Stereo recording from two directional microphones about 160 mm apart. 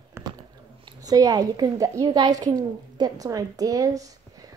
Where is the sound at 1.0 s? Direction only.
25° right (ahead or behind).